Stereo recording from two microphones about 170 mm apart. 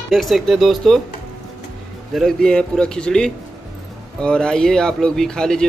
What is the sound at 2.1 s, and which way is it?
Speech, 5° left (ahead or behind).